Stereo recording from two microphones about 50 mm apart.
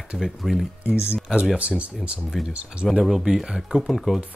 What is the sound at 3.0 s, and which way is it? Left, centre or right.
Speech, centre.